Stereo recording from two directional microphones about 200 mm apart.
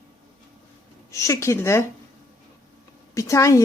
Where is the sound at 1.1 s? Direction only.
15° left (ahead or behind).